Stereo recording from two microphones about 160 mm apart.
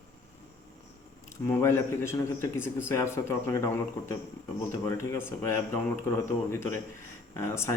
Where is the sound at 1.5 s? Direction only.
15° left (ahead or behind).